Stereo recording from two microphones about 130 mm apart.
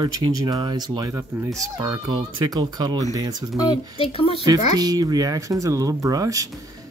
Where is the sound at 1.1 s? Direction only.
20° right (ahead or behind).